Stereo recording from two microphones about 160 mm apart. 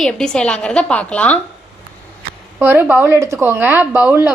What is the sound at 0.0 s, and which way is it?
Speech, 5° left (ahead or behind).